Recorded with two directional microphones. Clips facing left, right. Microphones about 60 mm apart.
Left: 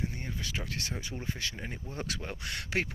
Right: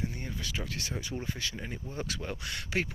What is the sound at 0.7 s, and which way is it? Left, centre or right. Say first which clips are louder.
Speech: even; left.